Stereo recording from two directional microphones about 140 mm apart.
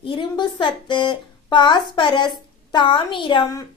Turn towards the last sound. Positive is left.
turn(degrees=35)  # may be behind; listen again after turning